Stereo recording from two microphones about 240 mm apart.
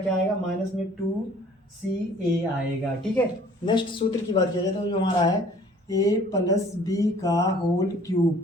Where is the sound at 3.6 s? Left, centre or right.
Centre.